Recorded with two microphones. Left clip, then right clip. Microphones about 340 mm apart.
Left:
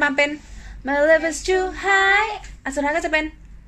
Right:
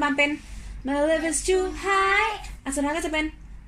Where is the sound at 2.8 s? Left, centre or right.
Left.